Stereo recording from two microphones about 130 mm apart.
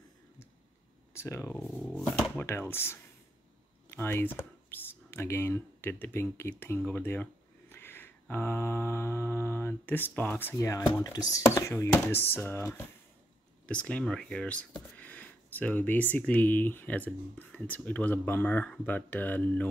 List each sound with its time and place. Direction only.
1.1 s speech: 20° left (ahead or behind)
1.8 s speech: 5° left (ahead or behind)
2.4 s speech: 20° left (ahead or behind)
7.7 s mantra: 15° left (ahead or behind)
11.0 s speech: 30° left (ahead or behind)
13.7 s speech: 10° left (ahead or behind)